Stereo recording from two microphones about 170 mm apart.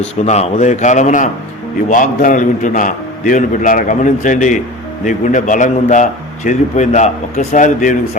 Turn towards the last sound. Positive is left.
turn(degrees=50)  # may be behind; listen again after turning